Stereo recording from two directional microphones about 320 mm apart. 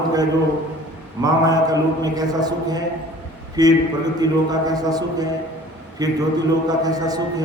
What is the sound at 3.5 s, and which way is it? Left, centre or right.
Speech, centre.